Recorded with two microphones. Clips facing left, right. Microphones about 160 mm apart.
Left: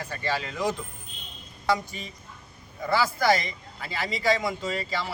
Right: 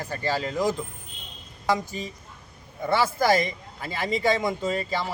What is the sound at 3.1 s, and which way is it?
Speech, 45° right (ahead or behind).